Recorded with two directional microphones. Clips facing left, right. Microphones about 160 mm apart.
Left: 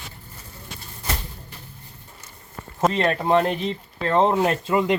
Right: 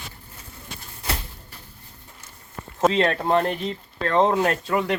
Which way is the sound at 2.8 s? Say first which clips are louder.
Right 1 dB; 5° left (ahead or behind).